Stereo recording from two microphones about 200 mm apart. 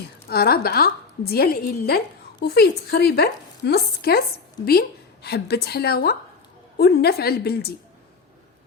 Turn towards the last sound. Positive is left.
turn(degrees=50)  # may be behind; listen again after turning